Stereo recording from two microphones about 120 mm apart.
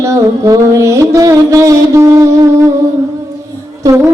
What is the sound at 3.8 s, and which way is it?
Music, 25° right (ahead or behind).